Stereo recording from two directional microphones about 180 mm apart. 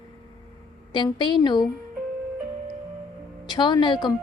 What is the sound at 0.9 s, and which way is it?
Speech, 25° left (ahead or behind).